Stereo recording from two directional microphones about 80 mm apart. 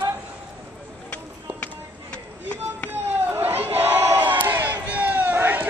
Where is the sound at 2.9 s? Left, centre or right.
Right.